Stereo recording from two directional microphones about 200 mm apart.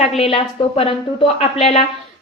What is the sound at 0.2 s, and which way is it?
A woman's voice, 30° left (ahead or behind).